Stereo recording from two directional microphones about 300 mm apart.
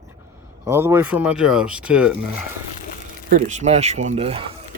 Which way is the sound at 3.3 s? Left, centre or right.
Right.